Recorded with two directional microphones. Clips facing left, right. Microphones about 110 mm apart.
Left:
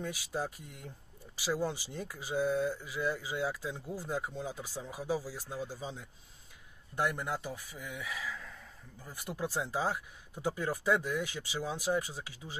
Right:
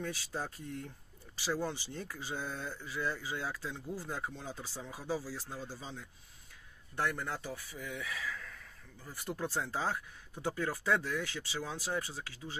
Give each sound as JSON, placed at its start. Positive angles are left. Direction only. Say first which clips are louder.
{"t": 0.0, "sound": "speech", "louder": "left 2 dB", "side_deg": 15}